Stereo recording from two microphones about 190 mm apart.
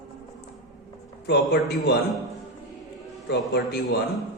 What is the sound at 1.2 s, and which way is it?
Speech, 60° left (ahead or behind).